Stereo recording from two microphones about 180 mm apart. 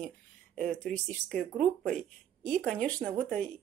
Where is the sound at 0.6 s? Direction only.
5° left (ahead or behind).